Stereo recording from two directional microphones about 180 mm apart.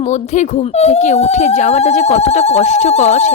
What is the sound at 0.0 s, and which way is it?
Speech, 40° left (ahead or behind).